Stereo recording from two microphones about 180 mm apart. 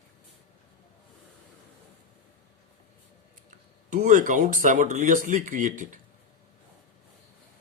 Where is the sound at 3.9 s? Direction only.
45° right (ahead or behind).